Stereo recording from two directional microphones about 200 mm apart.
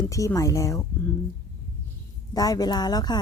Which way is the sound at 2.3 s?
20° left (ahead or behind).